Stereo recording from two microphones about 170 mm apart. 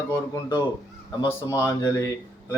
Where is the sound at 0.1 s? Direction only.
20° left (ahead or behind).